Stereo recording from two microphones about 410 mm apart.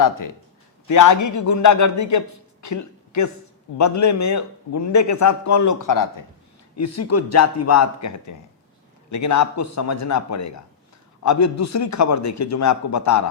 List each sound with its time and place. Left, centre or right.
0.9 s a man's voice: left
6.7 s a man's voice: left